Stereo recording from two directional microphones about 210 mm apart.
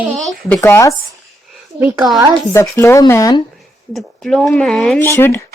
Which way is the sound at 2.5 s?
15° left (ahead or behind).